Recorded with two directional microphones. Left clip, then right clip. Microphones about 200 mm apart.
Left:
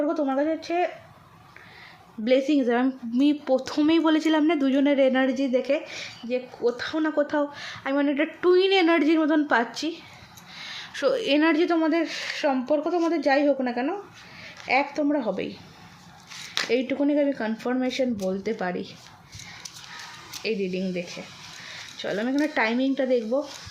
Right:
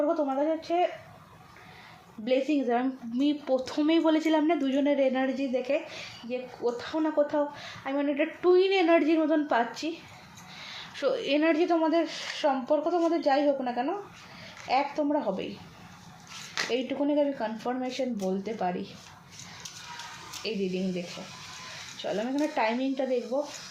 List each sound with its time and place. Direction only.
0.1 s speech: 45° left (ahead or behind)
2.2 s a woman's voice: 40° left (ahead or behind)
16.6 s a woman's voice: 40° left (ahead or behind)
20.4 s a woman's voice: 40° left (ahead or behind)
22.0 s a woman's voice: 40° left (ahead or behind)